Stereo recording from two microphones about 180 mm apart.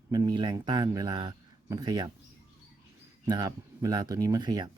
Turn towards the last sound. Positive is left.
turn(degrees=-25)  # may be behind; listen again after turning